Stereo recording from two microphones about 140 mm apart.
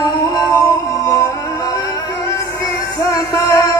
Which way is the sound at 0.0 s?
25° left (ahead or behind).